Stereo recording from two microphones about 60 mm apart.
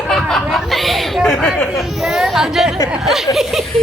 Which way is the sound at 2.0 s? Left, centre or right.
Centre.